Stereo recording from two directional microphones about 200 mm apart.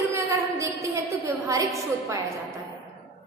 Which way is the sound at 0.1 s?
15° right (ahead or behind).